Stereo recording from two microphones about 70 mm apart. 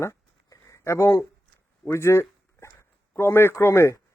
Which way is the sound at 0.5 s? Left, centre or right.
Left.